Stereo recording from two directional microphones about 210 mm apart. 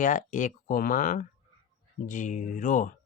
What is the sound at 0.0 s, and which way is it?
Speech, 40° left (ahead or behind).